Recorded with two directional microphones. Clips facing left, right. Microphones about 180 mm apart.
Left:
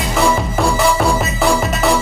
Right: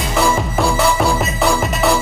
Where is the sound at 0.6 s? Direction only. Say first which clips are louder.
Even; centre (ahead or behind).